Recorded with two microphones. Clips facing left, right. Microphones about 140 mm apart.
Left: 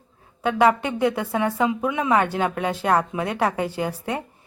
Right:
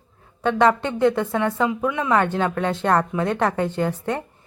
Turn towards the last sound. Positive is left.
turn(degrees=10)  # may be behind; listen again after turning